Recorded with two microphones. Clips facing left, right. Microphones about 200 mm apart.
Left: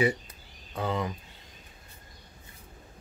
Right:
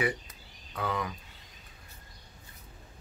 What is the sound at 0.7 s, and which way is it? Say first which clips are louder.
Speech: left 3 dB; 25° left (ahead or behind).